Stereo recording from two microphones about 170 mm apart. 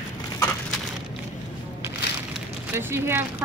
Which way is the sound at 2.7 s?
15° right (ahead or behind).